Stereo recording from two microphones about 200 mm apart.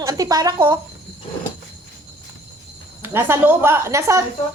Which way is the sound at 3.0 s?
10° right (ahead or behind).